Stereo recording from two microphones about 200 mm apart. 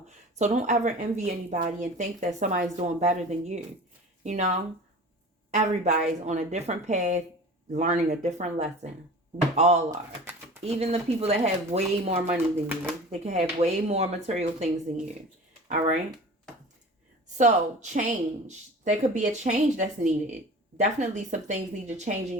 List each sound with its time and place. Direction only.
0.3 s a woman's voice: 35° right (ahead or behind)
17.3 s a woman's voice: 35° right (ahead or behind)